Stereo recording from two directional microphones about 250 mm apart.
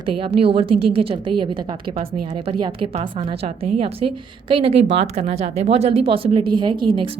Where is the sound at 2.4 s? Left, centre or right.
Right.